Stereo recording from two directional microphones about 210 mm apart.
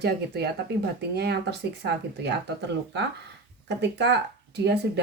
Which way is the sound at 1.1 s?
50° right (ahead or behind).